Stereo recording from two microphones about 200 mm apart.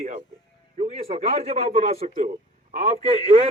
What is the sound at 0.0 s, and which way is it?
Music, 35° right (ahead or behind).